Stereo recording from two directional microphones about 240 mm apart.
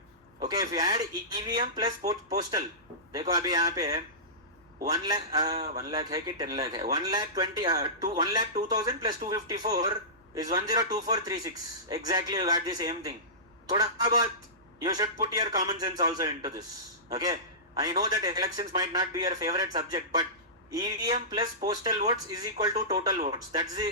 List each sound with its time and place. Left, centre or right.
0.4 s speech: centre